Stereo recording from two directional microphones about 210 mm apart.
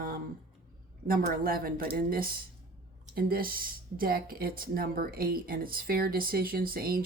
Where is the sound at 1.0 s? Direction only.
45° right (ahead or behind).